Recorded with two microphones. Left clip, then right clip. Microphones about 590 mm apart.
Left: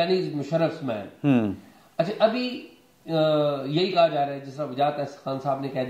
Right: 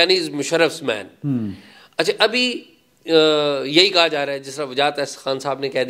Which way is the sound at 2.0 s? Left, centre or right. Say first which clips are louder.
Right 5 dB; right.